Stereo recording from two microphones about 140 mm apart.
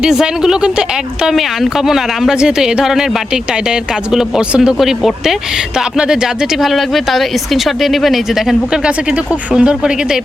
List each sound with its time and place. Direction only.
0.0 s speech: 5° right (ahead or behind)